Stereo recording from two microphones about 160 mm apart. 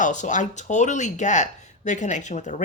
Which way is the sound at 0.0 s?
50° left (ahead or behind).